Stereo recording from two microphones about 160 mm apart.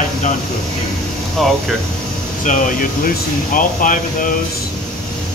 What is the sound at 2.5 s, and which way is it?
Speech, 60° left (ahead or behind).